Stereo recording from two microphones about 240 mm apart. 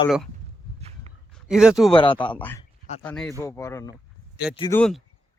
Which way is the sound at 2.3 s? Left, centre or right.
Centre.